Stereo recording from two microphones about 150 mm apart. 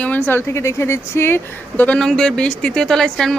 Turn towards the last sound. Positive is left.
turn(degrees=5)  # may be behind; listen again after turning